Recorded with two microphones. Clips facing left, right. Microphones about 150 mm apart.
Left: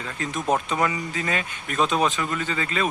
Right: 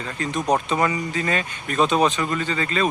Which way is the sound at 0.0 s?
Centre (ahead or behind).